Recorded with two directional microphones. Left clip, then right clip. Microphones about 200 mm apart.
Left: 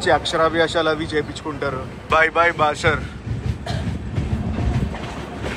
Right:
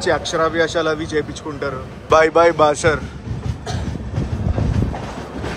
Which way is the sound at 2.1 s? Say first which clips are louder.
Right 4 dB; 25° right (ahead or behind).